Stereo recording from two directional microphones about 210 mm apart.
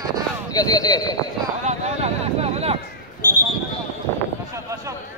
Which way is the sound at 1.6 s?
30° right (ahead or behind).